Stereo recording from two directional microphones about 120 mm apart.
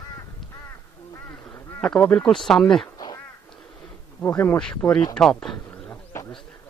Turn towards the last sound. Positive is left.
turn(degrees=20)  # may be behind; listen again after turning